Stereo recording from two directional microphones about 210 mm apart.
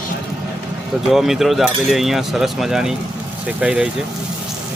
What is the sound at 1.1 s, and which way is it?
Speech, centre (ahead or behind).